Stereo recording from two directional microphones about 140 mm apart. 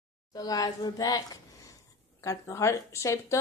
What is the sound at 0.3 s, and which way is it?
Speech, 25° left (ahead or behind).